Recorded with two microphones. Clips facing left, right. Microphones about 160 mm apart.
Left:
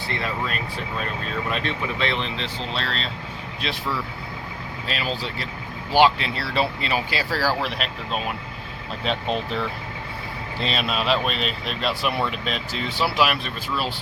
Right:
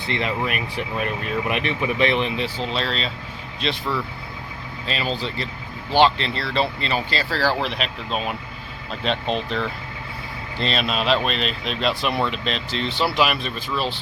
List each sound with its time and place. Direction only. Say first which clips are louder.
0.1 s speech: right 4 dB; 20° right (ahead or behind)
2.6 s speech: right 4 dB; centre (ahead or behind)
4.9 s speech: right 2 dB; 5° left (ahead or behind)